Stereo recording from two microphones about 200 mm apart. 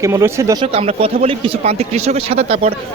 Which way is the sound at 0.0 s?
15° right (ahead or behind).